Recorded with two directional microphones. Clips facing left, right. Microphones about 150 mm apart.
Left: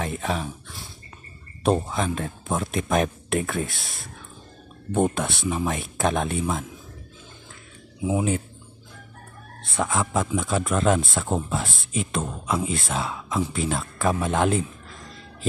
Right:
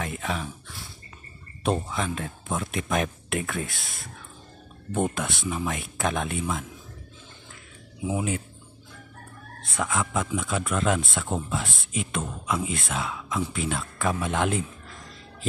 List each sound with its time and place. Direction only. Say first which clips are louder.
0.0 s a sound: left 3 dB; 35° left (ahead or behind)
1.6 s speech: left 4 dB; 40° left (ahead or behind)
4.9 s speech: left 4 dB; 35° left (ahead or behind)
8.0 s speech: left 4 dB; 25° left (ahead or behind)
9.8 s speech: left 3 dB; 35° left (ahead or behind)